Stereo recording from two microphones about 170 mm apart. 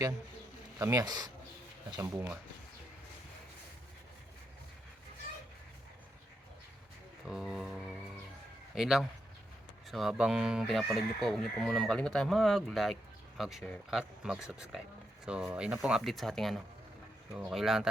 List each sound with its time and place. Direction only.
0.8 s speech: 20° right (ahead or behind)
7.3 s music: centre (ahead or behind)
8.7 s speech: 5° right (ahead or behind)